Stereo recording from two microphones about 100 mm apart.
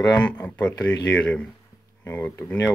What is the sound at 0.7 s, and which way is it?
Speech, 35° left (ahead or behind).